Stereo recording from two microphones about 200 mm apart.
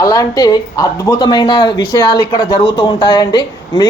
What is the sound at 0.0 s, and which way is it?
Speech, 15° left (ahead or behind).